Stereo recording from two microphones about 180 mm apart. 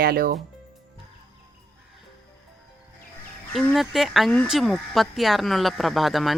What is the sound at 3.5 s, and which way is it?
Speech, centre (ahead or behind).